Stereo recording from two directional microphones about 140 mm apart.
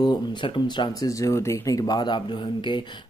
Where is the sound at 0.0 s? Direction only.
35° left (ahead or behind).